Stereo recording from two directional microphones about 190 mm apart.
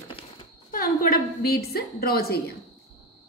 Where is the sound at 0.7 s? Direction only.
50° left (ahead or behind).